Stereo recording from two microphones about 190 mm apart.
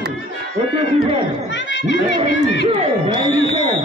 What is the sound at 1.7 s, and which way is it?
Speech, 70° left (ahead or behind).